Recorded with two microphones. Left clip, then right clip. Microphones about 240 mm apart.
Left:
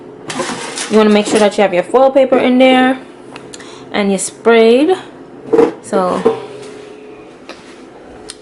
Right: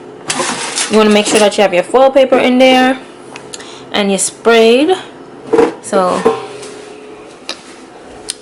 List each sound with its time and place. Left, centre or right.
0.3 s vehicle: centre
1.0 s a woman's voice: centre
1.9 s speech: left
2.1 s a woman's voice: centre